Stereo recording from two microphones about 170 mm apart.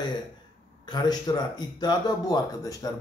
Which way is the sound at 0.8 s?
25° left (ahead or behind).